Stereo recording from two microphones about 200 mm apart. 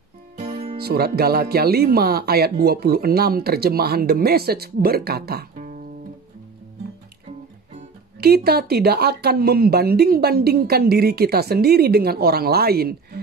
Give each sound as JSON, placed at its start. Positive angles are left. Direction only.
{"t": 0.4, "sound": "music", "side_deg": -30}
{"t": 0.7, "sound": "speech", "side_deg": -50}
{"t": 8.2, "sound": "speech", "side_deg": -50}